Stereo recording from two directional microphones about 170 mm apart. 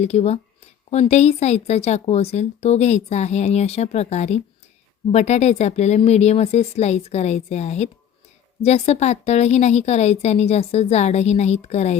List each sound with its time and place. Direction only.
0.0 s a woman's voice: 40° left (ahead or behind)